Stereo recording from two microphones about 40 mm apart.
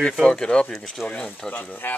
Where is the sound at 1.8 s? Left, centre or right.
Left.